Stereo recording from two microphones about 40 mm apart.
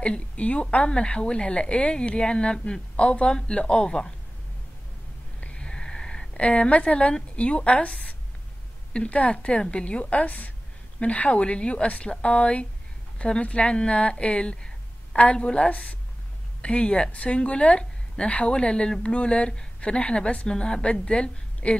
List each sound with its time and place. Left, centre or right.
0.0 s a woman's voice: left
5.4 s a sound: left
7.3 s a woman's voice: left
15.6 s a woman's voice: left